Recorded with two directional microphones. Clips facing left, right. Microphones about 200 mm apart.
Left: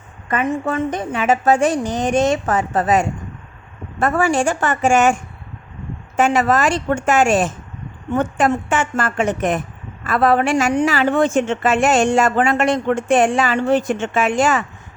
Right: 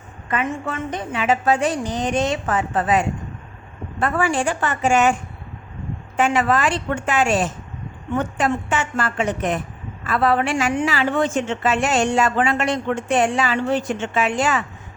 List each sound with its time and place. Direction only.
0.3 s a woman's voice: 45° left (ahead or behind)
6.1 s a woman's voice: 40° left (ahead or behind)